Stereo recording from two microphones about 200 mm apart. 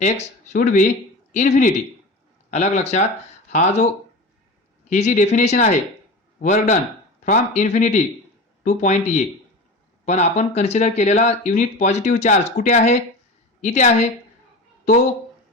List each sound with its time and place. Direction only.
0.0 s speech: 35° left (ahead or behind)
4.9 s speech: 35° left (ahead or behind)